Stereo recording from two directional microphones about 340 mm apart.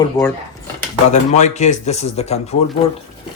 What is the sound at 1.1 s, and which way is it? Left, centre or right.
Speech, left.